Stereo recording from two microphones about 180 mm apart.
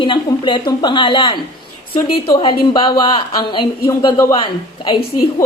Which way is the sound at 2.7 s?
25° left (ahead or behind).